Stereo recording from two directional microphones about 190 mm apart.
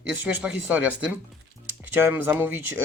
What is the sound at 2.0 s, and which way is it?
Speech, 10° right (ahead or behind).